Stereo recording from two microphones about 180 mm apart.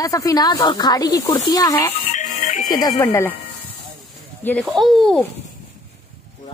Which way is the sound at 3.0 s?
15° left (ahead or behind).